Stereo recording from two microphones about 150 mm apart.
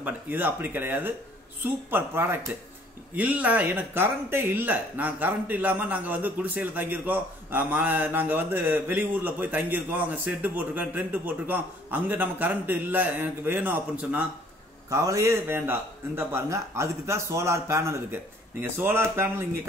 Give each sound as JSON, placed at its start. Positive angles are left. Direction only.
{"t": 0.0, "sound": "speech", "side_deg": -10}
{"t": 14.9, "sound": "speech", "side_deg": -20}